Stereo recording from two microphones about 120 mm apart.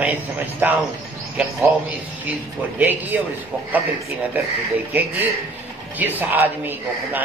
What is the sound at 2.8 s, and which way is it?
Speech, 15° right (ahead or behind).